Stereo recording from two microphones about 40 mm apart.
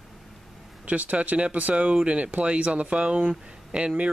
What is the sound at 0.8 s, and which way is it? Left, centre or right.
Speech, right.